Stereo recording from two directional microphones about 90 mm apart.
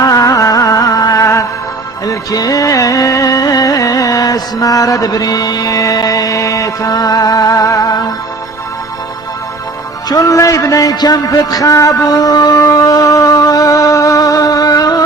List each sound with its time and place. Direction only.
0.0 s music: 40° left (ahead or behind)
10.1 s a man's voice: 40° left (ahead or behind)